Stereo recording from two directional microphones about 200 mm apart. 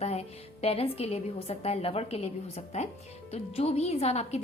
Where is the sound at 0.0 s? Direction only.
30° left (ahead or behind).